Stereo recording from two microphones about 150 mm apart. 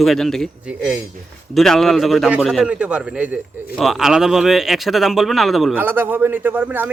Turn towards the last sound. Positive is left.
turn(degrees=-15)  # may be behind; listen again after turning